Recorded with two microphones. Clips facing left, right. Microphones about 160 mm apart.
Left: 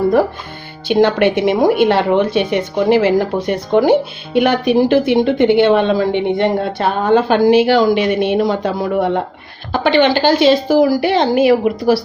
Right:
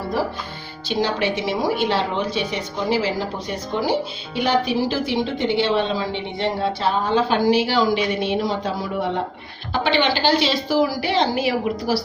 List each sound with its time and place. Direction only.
0.9 s a woman's voice: 60° left (ahead or behind)